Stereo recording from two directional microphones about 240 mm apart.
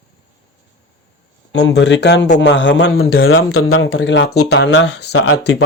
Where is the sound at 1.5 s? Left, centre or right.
Left.